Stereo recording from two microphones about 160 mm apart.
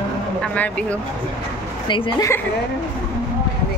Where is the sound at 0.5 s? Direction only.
10° left (ahead or behind).